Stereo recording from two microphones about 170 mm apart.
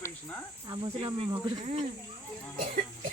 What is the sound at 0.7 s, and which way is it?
Speech, 25° right (ahead or behind).